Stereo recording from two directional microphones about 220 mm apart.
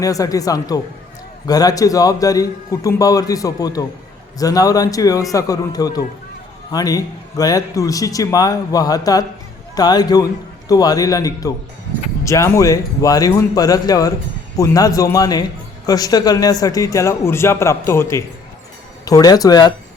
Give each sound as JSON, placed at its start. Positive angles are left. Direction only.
{"t": 0.0, "sound": "a man's voice", "side_deg": 15}